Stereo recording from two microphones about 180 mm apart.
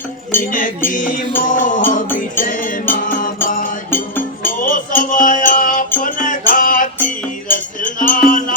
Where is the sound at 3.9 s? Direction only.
10° left (ahead or behind).